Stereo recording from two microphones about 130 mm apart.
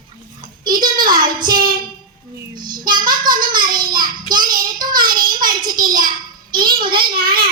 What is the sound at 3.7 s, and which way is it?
Child singing, 35° right (ahead or behind).